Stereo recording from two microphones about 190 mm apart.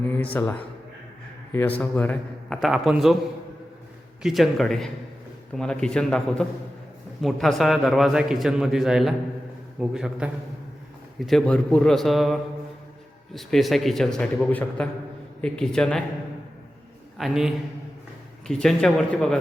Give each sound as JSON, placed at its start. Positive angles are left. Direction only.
{"t": 0.0, "sound": "a sound", "side_deg": 10}
{"t": 1.8, "sound": "a man's voice", "side_deg": 5}
{"t": 4.2, "sound": "a man's voice", "side_deg": 0}
{"t": 17.2, "sound": "a man's voice", "side_deg": 0}